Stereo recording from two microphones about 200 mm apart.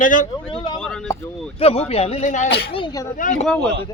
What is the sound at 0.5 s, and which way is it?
Speech, 20° left (ahead or behind).